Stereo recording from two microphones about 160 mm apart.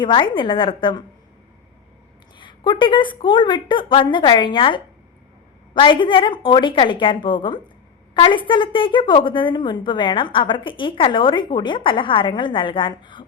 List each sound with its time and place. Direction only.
0.0 s a woman's voice: 30° left (ahead or behind)
2.4 s a woman's voice: 30° left (ahead or behind)